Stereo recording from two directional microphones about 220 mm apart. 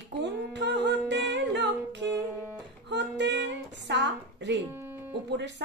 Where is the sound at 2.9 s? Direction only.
50° right (ahead or behind).